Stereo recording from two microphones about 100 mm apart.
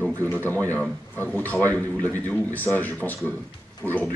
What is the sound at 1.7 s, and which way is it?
A man's voice, 15° left (ahead or behind).